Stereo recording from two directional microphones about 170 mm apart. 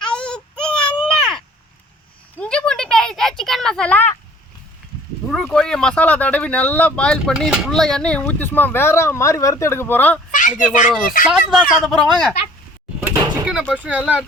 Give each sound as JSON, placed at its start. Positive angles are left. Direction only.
{"t": 0.0, "sound": "baby cry", "side_deg": 5}
{"t": 2.4, "sound": "a sound", "side_deg": 5}
{"t": 5.3, "sound": "speech", "side_deg": 5}
{"t": 10.3, "sound": "speech", "side_deg": 50}
{"t": 11.3, "sound": "speech", "side_deg": -5}
{"t": 13.4, "sound": "speech", "side_deg": -5}